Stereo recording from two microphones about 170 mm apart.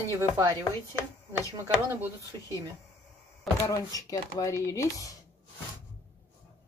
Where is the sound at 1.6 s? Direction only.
15° right (ahead or behind).